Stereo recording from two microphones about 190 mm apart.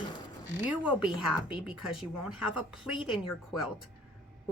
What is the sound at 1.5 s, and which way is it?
Speech, 5° right (ahead or behind).